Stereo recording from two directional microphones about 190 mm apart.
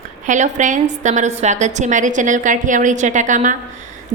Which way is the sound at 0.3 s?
40° right (ahead or behind).